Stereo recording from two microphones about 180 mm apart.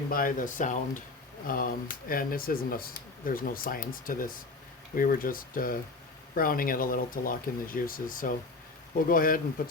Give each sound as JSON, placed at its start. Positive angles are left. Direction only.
{"t": 0.1, "sound": "speech", "side_deg": 50}